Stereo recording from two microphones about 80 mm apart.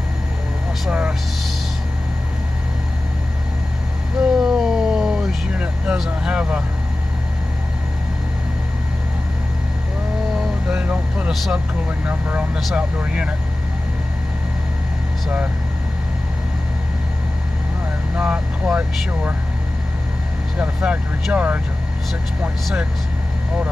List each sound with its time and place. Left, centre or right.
0.8 s vehicle: centre
4.2 s vehicle: centre
10.7 s vehicle: centre
11.4 s speech: centre
12.1 s speech: centre
18.1 s speech: centre
20.5 s speech: centre